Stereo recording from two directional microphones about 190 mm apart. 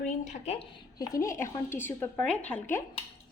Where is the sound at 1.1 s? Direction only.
15° left (ahead or behind).